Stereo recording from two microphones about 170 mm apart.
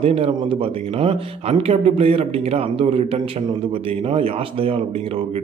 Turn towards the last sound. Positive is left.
turn(degrees=-35)  # may be behind; listen again after turning